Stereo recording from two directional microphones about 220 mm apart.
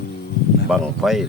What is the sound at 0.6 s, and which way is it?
Speech, centre (ahead or behind).